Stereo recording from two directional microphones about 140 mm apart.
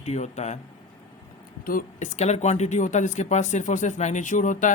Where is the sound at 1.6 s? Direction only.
80° left.